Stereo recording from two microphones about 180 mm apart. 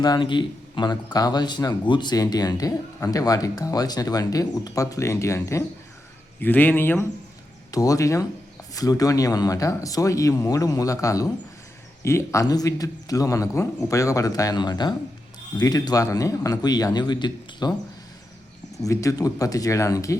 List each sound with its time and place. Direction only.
0.0 s speech: 25° left (ahead or behind)
18.8 s speech: 20° left (ahead or behind)